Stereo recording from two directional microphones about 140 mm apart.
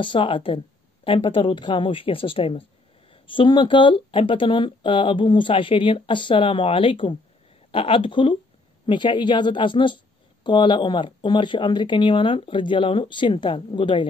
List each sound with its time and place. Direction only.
0.0 s speech: 35° left (ahead or behind)